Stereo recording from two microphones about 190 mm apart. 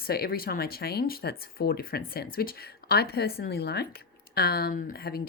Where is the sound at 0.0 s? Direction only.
55° left (ahead or behind).